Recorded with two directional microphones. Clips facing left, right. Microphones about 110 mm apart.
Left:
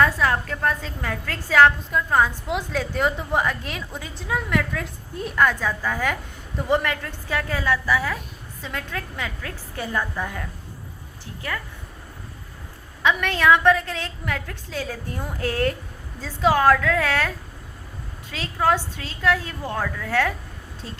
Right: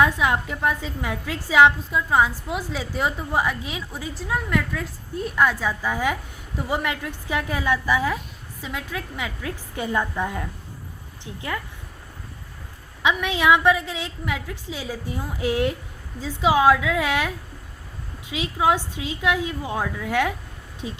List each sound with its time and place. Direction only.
0.0 s a woman's voice: 10° right (ahead or behind)
13.0 s a woman's voice: 15° right (ahead or behind)